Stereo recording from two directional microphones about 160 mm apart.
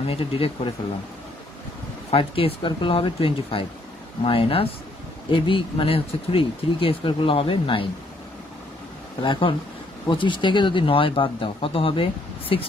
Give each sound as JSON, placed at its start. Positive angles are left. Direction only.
{"t": 0.0, "sound": "speech", "side_deg": 35}
{"t": 2.0, "sound": "speech", "side_deg": 35}
{"t": 9.2, "sound": "speech", "side_deg": 30}